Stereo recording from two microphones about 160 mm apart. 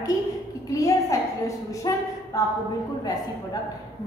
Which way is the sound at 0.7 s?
20° left (ahead or behind).